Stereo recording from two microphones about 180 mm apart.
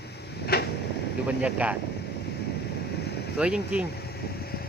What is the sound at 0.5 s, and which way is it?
Vehicle, 60° left (ahead or behind).